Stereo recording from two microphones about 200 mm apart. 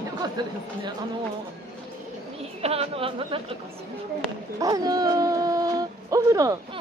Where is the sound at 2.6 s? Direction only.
30° right (ahead or behind).